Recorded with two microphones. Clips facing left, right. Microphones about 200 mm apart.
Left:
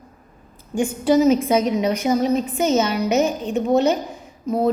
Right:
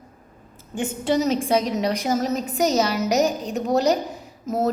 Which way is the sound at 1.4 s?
35° right (ahead or behind).